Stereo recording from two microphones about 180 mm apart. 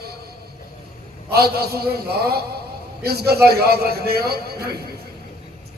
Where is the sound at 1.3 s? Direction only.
60° right (ahead or behind).